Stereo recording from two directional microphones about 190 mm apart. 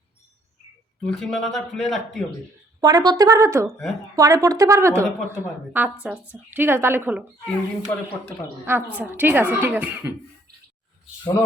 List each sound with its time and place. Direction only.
1.0 s speech: centre (ahead or behind)
2.8 s a woman's voice: 20° right (ahead or behind)
7.4 s speech: 5° left (ahead or behind)
9.0 s a woman's voice: 10° right (ahead or behind)